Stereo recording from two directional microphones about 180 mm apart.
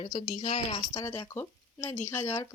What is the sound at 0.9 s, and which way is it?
Speech, 15° left (ahead or behind).